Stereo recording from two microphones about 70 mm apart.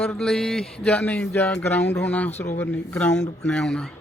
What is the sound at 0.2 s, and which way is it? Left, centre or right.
Speech, centre.